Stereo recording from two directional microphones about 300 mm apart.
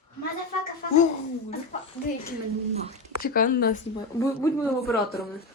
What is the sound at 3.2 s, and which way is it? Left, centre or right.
Speech, left.